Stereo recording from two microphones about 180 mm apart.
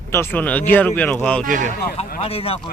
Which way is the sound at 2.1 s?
30° left (ahead or behind).